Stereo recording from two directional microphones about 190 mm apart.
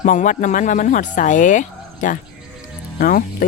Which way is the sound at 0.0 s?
40° left (ahead or behind).